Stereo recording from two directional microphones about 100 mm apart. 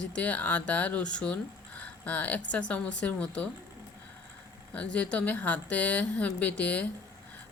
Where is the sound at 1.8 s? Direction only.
15° left (ahead or behind).